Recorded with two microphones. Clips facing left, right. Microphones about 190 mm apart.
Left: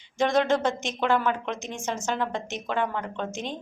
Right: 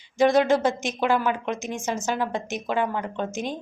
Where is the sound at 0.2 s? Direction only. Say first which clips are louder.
Right 4 dB; 10° right (ahead or behind).